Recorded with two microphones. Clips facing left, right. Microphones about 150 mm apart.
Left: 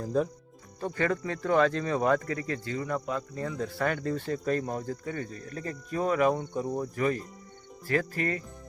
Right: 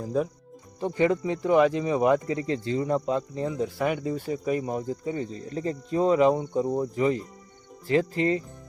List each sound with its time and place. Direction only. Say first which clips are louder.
0.0 s speech: right 1 dB; 5° right (ahead or behind)
0.8 s speech: right 5 dB; 20° right (ahead or behind)